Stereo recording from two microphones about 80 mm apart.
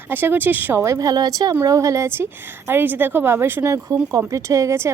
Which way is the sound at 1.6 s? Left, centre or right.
Right.